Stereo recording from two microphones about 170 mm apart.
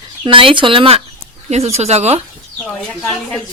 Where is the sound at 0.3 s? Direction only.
30° right (ahead or behind).